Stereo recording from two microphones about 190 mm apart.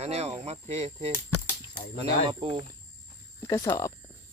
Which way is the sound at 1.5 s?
45° left (ahead or behind).